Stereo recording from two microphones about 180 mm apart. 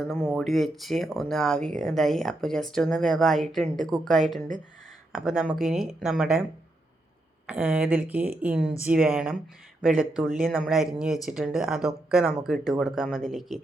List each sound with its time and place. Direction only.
0.0 s speech: 5° left (ahead or behind)
4.4 s speech: 45° right (ahead or behind)
5.1 s speech: 5° right (ahead or behind)
7.4 s speech: 5° right (ahead or behind)